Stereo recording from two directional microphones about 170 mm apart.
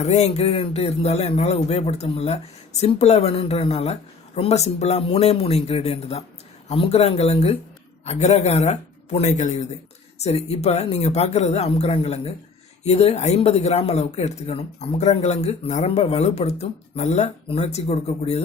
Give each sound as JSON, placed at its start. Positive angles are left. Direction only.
{"t": 0.0, "sound": "speech", "side_deg": 40}